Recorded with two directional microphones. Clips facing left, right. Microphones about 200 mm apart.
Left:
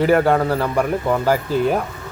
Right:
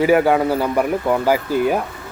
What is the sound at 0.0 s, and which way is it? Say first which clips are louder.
Speech: right 1 dB; 5° right (ahead or behind).